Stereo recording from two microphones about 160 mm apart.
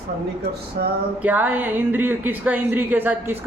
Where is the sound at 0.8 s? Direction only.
70° right (ahead or behind).